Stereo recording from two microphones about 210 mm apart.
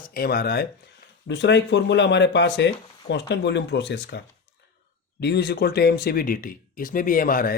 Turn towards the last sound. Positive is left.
turn(degrees=40)  # may be behind; listen again after turning